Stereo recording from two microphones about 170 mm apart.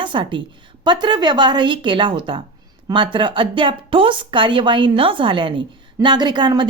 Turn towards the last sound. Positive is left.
turn(degrees=-25)  # may be behind; listen again after turning